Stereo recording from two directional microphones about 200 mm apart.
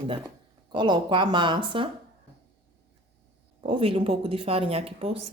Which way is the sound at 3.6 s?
30° right (ahead or behind).